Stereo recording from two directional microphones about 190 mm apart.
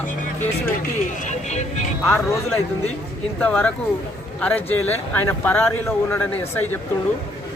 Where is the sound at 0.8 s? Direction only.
40° left (ahead or behind).